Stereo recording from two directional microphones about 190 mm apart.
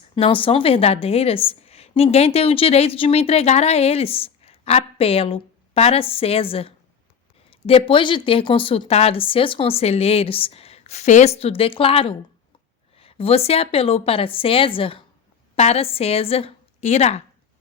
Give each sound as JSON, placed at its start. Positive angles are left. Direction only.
{"t": 0.2, "sound": "a woman's voice", "side_deg": 30}